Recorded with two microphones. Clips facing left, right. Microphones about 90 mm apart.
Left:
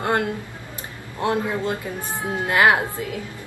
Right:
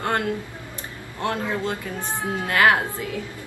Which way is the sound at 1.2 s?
20° left (ahead or behind).